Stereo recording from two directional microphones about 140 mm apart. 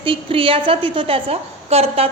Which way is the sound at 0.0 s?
40° right (ahead or behind).